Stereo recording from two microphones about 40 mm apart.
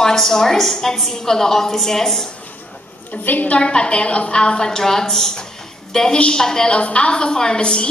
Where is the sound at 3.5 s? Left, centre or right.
Left.